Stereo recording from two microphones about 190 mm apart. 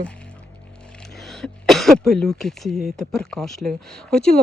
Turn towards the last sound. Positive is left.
turn(degrees=5)  # may be behind; listen again after turning